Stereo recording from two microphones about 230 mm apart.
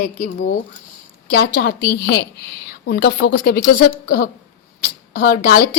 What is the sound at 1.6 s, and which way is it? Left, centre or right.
A woman's voice, left.